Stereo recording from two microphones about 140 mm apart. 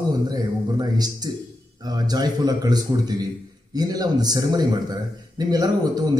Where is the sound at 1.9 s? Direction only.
30° right (ahead or behind).